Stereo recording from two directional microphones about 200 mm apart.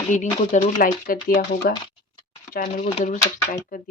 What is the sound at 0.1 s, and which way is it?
Speech, 40° left (ahead or behind).